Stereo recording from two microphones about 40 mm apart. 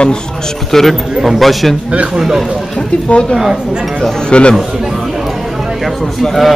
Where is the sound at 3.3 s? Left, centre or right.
Centre.